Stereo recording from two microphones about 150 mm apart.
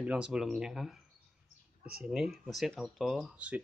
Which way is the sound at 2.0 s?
Centre (ahead or behind).